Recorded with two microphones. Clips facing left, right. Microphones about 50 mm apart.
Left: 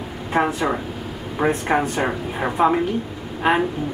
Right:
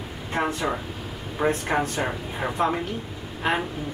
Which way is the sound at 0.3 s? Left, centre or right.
Centre.